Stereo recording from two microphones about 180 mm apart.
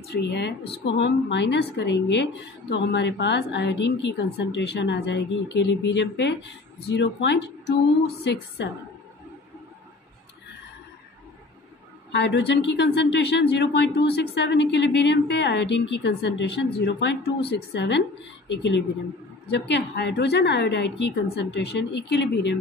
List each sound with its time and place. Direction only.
0.1 s speech: 70° left (ahead or behind)
12.1 s speech: 75° left (ahead or behind)